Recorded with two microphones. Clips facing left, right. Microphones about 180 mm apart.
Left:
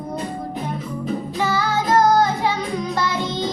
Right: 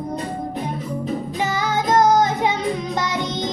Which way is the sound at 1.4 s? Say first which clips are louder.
Left 1 dB; 20° right (ahead or behind).